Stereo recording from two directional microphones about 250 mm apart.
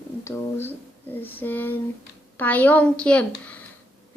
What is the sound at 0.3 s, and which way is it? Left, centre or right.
A woman's voice, centre.